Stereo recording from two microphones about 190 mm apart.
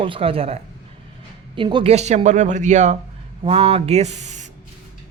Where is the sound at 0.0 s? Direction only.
30° right (ahead or behind).